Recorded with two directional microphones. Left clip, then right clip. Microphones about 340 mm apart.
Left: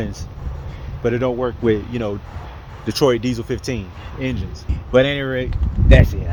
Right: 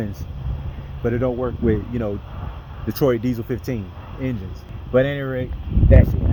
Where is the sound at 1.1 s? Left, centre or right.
Centre.